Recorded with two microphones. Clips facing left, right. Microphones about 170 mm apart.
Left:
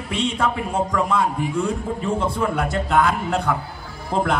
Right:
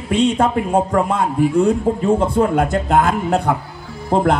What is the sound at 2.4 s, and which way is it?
A man's voice, 45° right (ahead or behind).